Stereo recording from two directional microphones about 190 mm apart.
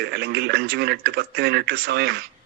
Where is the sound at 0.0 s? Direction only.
60° right (ahead or behind).